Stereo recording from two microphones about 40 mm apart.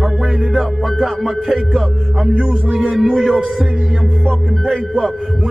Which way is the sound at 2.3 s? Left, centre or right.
Right.